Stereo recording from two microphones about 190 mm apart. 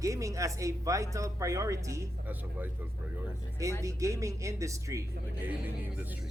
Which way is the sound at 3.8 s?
15° right (ahead or behind).